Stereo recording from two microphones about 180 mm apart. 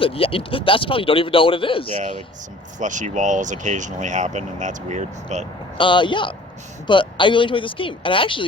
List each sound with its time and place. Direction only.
0.0 s a man's voice: 30° left (ahead or behind)
2.7 s speech: 45° right (ahead or behind)
5.7 s a man's voice: 25° left (ahead or behind)